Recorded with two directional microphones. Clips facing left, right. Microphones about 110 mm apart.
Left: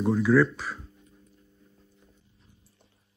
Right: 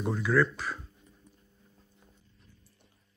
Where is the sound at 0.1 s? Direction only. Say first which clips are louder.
Left 5 dB; centre (ahead or behind).